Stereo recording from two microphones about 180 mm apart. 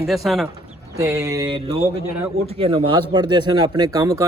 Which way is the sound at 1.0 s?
15° right (ahead or behind).